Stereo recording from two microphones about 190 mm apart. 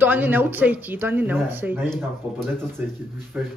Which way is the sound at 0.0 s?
10° right (ahead or behind).